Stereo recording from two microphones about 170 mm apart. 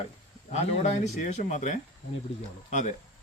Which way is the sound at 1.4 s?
45° left (ahead or behind).